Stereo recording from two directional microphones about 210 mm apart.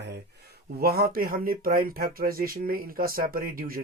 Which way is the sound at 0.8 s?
45° right (ahead or behind).